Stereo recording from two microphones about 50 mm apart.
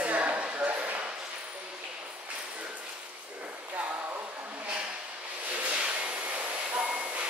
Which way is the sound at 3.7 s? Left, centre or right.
Right.